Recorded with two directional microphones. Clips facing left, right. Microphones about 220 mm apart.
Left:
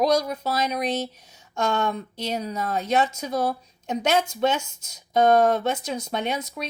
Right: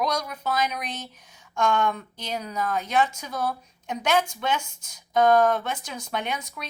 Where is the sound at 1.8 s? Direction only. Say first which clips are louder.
Left 2 dB; 30° left (ahead or behind).